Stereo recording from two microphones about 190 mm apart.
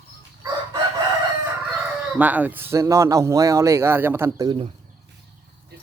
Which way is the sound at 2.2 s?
10° right (ahead or behind).